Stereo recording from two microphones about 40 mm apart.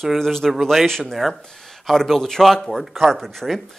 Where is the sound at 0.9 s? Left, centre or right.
Centre.